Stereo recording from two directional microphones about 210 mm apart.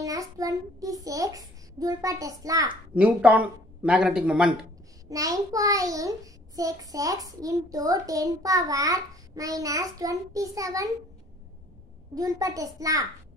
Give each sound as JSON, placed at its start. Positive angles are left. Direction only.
{"t": 0.0, "sound": "a child's voice", "side_deg": -15}
{"t": 2.9, "sound": "speech", "side_deg": -5}
{"t": 5.1, "sound": "a child's voice", "side_deg": -15}
{"t": 12.2, "sound": "a child's voice", "side_deg": -15}